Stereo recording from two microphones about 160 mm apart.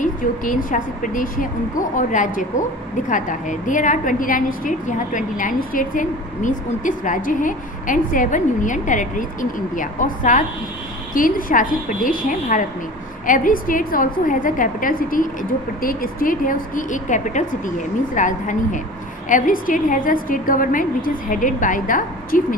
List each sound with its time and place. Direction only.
0.0 s a woman's voice: 55° left (ahead or behind)